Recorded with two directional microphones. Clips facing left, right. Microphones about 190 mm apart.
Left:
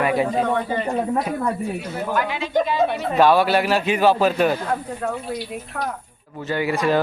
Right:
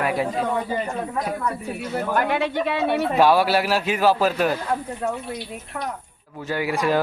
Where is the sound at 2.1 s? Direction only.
55° right (ahead or behind).